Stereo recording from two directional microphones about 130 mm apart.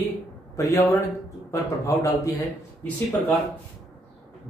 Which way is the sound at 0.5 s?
25° left (ahead or behind).